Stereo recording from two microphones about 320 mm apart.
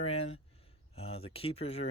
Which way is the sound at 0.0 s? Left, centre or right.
Centre.